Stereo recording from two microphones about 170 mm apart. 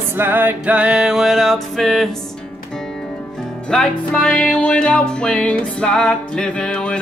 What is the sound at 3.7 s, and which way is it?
Music, 5° left (ahead or behind).